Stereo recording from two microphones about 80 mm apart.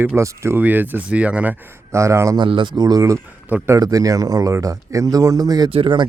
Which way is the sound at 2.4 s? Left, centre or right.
Right.